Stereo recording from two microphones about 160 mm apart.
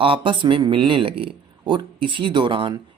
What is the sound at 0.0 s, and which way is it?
Speech, 30° right (ahead or behind).